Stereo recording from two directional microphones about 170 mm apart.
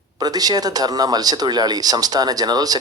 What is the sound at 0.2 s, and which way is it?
Speech, 20° right (ahead or behind).